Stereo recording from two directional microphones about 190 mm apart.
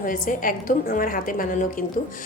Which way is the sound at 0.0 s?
45° left (ahead or behind).